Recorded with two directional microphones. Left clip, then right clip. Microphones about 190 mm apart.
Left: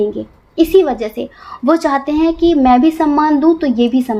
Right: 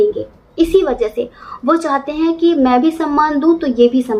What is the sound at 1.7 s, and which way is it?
A woman's voice, 50° left (ahead or behind).